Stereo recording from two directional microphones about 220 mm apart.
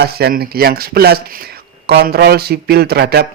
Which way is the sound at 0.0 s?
45° right (ahead or behind).